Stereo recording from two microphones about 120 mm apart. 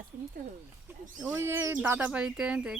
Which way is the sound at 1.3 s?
20° right (ahead or behind).